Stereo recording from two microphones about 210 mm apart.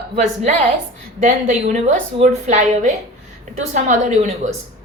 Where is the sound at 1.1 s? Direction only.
35° right (ahead or behind).